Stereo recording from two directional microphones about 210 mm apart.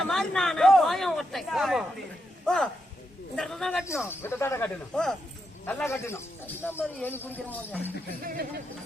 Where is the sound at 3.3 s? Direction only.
Centre (ahead or behind).